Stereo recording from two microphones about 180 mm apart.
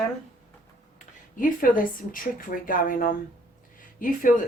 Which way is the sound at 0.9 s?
50° left (ahead or behind).